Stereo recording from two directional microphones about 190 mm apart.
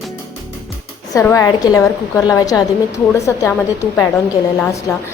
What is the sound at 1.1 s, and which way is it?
A woman's voice, 15° left (ahead or behind).